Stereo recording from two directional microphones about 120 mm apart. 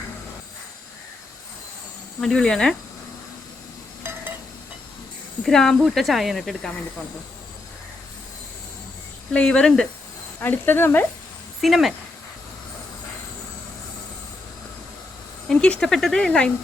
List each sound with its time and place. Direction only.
2.2 s speech: 5° left (ahead or behind)
5.4 s speech: 5° left (ahead or behind)
9.3 s speech: 10° left (ahead or behind)
10.4 s speech: 15° left (ahead or behind)
11.6 s speech: centre (ahead or behind)
15.4 s speech: 5° left (ahead or behind)